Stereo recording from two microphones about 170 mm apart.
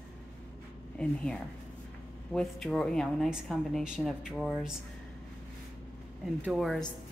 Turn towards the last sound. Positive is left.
turn(degrees=0)  # may be behind; listen again after turning